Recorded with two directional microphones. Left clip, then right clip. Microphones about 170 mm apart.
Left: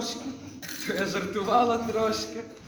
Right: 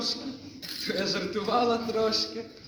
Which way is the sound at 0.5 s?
25° right (ahead or behind).